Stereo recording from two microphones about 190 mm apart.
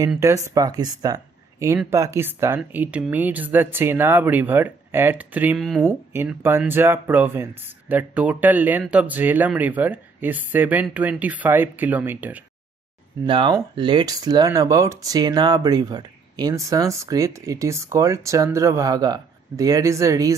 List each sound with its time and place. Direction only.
0.2 s speech: 15° right (ahead or behind)
13.3 s speech: 25° right (ahead or behind)